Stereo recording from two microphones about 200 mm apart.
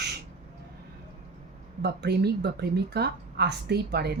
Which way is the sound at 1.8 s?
55° right (ahead or behind).